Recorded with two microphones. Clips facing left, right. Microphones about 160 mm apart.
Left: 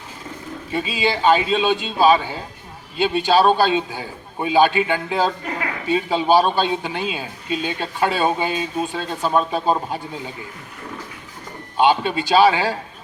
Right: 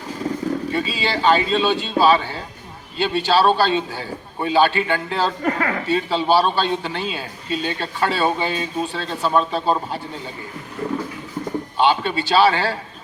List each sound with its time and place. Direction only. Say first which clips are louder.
0.7 s a man's voice: left 1 dB; 15° left (ahead or behind)
5.4 s speech: right 6 dB; 50° right (ahead or behind)
5.9 s a man's voice: left 2 dB; 15° left (ahead or behind)
11.8 s a man's voice: left 2 dB; 15° left (ahead or behind)